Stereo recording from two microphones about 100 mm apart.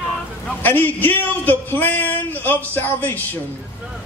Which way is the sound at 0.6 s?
20° left (ahead or behind).